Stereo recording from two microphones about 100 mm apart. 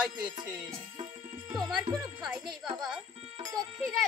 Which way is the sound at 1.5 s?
45° right (ahead or behind).